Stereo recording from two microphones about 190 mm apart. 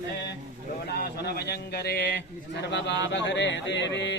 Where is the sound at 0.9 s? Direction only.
55° left (ahead or behind).